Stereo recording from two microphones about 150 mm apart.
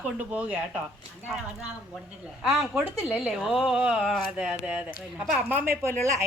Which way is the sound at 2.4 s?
Centre (ahead or behind).